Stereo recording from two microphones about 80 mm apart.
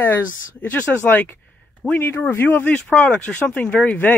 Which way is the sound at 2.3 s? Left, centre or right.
Left.